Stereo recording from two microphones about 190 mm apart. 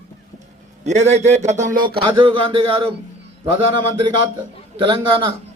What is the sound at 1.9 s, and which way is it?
Speech, 25° right (ahead or behind).